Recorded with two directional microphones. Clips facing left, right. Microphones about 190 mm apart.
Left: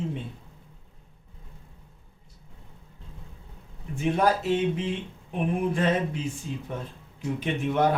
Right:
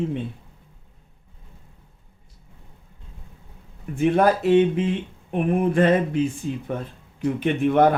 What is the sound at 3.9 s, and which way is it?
Speech, 60° right (ahead or behind).